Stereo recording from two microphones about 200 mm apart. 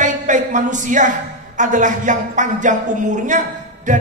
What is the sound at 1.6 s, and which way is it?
Speech, 40° right (ahead or behind).